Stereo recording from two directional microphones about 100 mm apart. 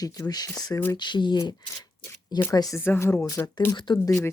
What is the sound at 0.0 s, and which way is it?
Speech, 40° left (ahead or behind).